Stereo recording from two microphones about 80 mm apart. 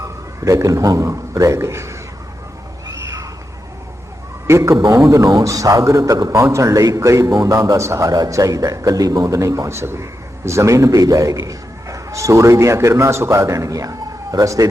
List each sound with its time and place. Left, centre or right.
0.0 s a man's voice: right
2.8 s a sound: right
4.4 s a man's voice: right